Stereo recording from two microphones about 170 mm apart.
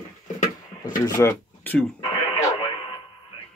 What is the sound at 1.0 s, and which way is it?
Speech, 15° left (ahead or behind).